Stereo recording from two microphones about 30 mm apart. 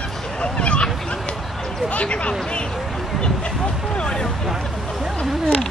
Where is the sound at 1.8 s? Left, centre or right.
Left.